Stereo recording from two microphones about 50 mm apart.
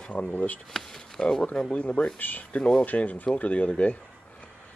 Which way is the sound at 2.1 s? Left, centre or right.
Left.